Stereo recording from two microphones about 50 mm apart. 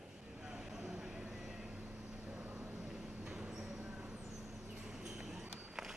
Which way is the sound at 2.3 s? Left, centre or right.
Right.